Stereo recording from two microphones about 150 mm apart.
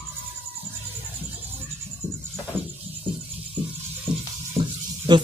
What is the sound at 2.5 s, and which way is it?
Music, 15° right (ahead or behind).